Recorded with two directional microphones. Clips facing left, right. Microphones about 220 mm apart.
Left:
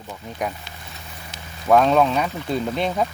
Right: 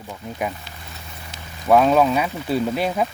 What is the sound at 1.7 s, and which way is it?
Speech, 5° right (ahead or behind).